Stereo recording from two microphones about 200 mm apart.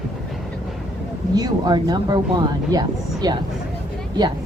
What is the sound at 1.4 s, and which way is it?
Speech, 20° right (ahead or behind).